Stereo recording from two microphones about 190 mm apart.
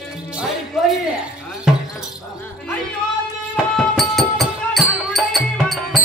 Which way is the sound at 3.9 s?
Centre (ahead or behind).